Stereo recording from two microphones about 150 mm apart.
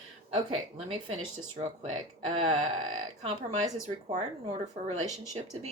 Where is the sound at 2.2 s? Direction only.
45° right (ahead or behind).